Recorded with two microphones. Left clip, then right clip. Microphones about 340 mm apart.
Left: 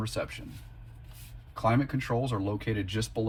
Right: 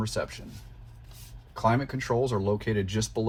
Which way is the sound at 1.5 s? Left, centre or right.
Right.